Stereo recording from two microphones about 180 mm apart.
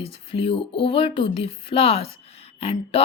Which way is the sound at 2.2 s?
35° left (ahead or behind).